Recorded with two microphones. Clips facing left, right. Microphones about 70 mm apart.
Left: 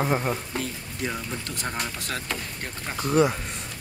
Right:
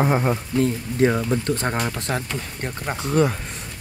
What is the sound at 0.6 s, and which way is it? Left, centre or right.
Speech, right.